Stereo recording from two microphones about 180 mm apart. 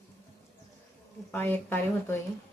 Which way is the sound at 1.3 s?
10° left (ahead or behind).